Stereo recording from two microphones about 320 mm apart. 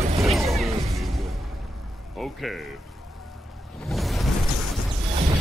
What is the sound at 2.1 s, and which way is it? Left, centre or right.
Speech, centre.